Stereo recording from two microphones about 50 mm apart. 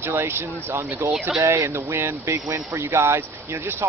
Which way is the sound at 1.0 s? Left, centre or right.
Right.